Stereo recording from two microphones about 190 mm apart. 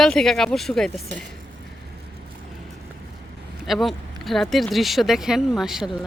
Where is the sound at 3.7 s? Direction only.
Centre (ahead or behind).